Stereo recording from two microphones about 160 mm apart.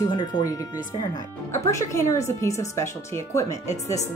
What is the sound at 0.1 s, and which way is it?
Speech, 25° left (ahead or behind).